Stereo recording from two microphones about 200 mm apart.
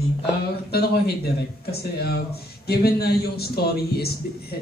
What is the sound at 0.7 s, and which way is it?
A man's voice, 50° left (ahead or behind).